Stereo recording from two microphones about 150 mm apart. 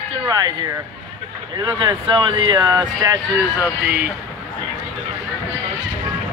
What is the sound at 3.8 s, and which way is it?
Speech, 10° right (ahead or behind).